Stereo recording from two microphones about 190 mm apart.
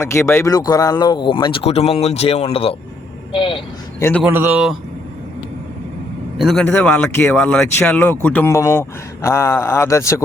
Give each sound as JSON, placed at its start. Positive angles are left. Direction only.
{"t": 0.0, "sound": "speech", "side_deg": 15}
{"t": 4.2, "sound": "speech", "side_deg": -10}
{"t": 6.3, "sound": "speech", "side_deg": 0}